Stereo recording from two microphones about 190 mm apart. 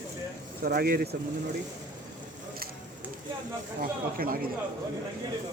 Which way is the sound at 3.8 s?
50° right (ahead or behind).